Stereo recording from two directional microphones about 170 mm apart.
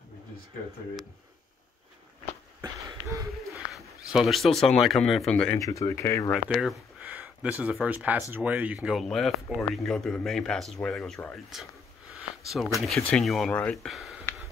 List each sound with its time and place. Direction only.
2.6 s a sound: 20° right (ahead or behind)
3.7 s speech: centre (ahead or behind)
5.6 s speech: 20° left (ahead or behind)
6.3 s speech: centre (ahead or behind)
12.1 s a sound: centre (ahead or behind)
12.7 s speech: centre (ahead or behind)